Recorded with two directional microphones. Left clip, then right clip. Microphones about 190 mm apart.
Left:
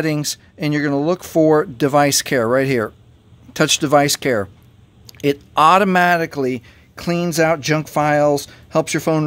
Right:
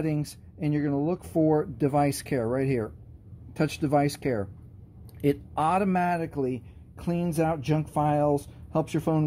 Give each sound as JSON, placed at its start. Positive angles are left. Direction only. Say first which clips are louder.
{"t": 0.0, "sound": "speech", "louder": "left 10 dB", "side_deg": 30}